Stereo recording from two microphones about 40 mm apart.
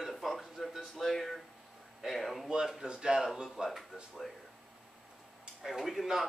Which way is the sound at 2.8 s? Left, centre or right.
Right.